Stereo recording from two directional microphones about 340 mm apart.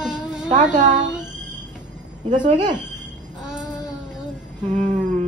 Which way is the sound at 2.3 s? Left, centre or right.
Centre.